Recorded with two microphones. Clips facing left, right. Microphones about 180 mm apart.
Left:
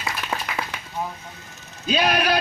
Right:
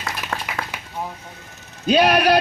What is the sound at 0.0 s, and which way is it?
Clapping, 5° left (ahead or behind).